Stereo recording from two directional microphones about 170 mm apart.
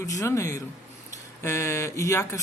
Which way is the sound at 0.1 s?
20° left (ahead or behind).